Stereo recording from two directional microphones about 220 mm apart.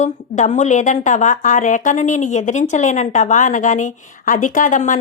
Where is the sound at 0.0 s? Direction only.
35° left (ahead or behind).